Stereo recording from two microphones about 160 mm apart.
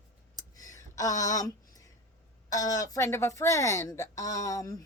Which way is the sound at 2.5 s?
20° left (ahead or behind).